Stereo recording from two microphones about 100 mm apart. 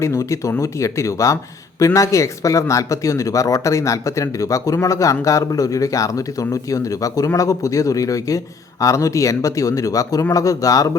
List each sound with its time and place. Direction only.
0.0 s speech: 30° left (ahead or behind)